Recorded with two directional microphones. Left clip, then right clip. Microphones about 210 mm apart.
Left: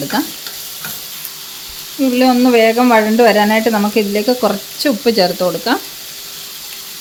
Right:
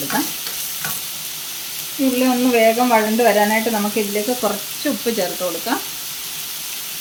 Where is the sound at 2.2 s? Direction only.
50° left (ahead or behind).